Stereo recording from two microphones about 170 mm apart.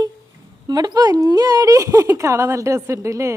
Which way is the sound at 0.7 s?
25° right (ahead or behind).